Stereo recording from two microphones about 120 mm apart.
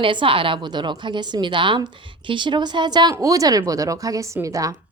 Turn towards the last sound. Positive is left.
turn(degrees=-30)  # may be behind; listen again after turning